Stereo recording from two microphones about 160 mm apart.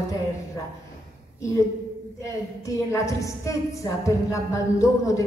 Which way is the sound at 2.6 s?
20° left (ahead or behind).